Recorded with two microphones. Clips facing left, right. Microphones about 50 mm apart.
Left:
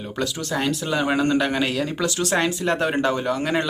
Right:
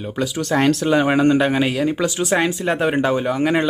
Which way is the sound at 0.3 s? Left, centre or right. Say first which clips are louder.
Right 10 dB; right.